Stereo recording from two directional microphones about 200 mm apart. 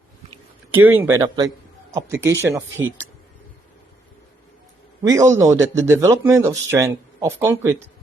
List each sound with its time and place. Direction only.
0.7 s speech: 10° right (ahead or behind)
5.0 s speech: 15° right (ahead or behind)